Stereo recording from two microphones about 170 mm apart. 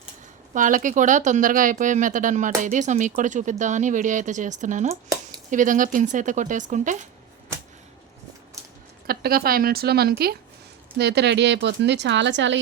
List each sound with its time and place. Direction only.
0.5 s speech: 50° right (ahead or behind)
9.0 s a woman's voice: 60° right (ahead or behind); by 12.5 s 90° right